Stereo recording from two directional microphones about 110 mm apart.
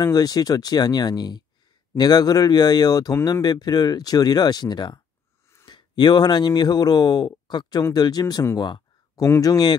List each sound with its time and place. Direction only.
0.0 s speech: 35° left (ahead or behind)